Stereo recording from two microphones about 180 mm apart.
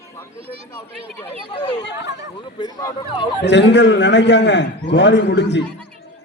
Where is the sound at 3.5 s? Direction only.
75° left (ahead or behind).